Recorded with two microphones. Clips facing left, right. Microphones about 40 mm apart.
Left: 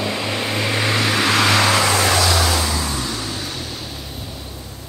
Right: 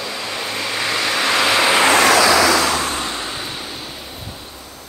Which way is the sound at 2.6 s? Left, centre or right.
Right.